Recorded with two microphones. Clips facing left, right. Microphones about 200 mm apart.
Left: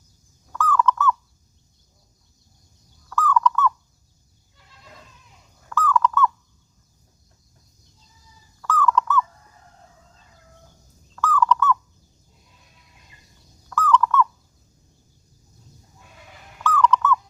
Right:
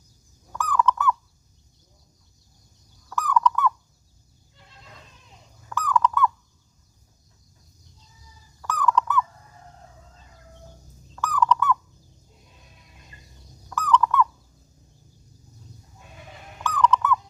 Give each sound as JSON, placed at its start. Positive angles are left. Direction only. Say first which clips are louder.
{"t": 0.5, "sound": "bird", "louder": "left 2 dB", "side_deg": -15}
{"t": 3.1, "sound": "fowl", "louder": "left 2 dB", "side_deg": -15}
{"t": 5.6, "sound": "bird", "louder": "left 2 dB", "side_deg": -15}
{"t": 8.6, "sound": "bird", "louder": "left 2 dB", "side_deg": -15}
{"t": 11.1, "sound": "fowl", "louder": "left 2 dB", "side_deg": -15}
{"t": 13.7, "sound": "owl", "louder": "left 2 dB", "side_deg": -15}
{"t": 16.6, "sound": "owl", "louder": "left 2 dB", "side_deg": -20}